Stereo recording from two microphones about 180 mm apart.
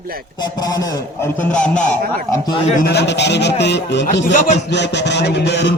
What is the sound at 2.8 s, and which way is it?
A man's voice, 65° left (ahead or behind).